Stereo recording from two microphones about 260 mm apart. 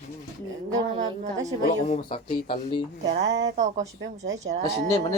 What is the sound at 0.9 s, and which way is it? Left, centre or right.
Speech, centre.